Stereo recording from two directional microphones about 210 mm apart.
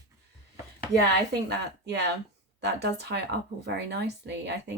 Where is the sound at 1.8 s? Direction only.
55° right (ahead or behind).